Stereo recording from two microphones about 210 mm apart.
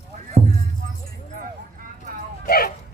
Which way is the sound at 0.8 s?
40° right (ahead or behind).